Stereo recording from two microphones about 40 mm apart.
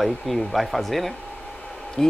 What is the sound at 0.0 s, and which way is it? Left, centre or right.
Speech, centre.